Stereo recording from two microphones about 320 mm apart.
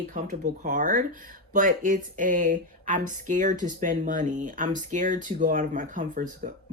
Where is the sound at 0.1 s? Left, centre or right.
Right.